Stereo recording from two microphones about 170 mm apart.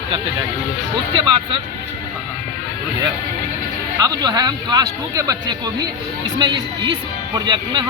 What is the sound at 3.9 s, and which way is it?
A man's voice, 20° right (ahead or behind).